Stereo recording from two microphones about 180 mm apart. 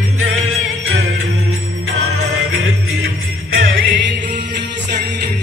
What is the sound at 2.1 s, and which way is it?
Music, 90° right.